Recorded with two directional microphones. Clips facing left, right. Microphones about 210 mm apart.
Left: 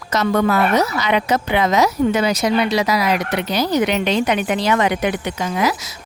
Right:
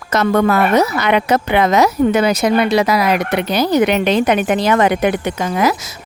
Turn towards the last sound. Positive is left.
turn(degrees=-50)  # may be behind; listen again after turning